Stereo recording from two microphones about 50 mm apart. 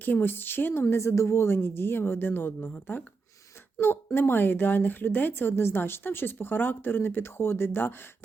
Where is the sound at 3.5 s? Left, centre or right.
Left.